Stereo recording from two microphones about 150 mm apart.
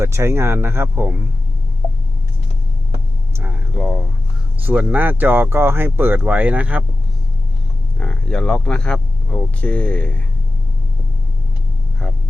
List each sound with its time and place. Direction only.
0.0 s speech: 20° right (ahead or behind)
3.3 s a sound: 10° right (ahead or behind)
3.8 s speech: centre (ahead or behind)
7.9 s speech: 5° left (ahead or behind)
12.0 s speech: centre (ahead or behind)